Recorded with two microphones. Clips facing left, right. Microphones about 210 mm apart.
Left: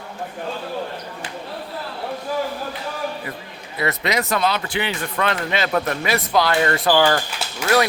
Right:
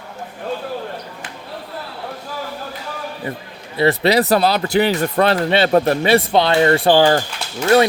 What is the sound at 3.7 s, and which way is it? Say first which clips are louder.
Speech: right 8 dB; 30° right (ahead or behind).